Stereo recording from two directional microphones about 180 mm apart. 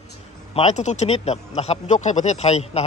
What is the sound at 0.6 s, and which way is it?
Speech, 40° left (ahead or behind).